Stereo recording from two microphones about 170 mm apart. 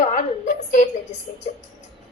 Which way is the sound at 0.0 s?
45° left (ahead or behind).